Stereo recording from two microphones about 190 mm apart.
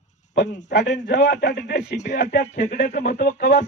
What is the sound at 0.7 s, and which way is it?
A man's voice, 65° left (ahead or behind).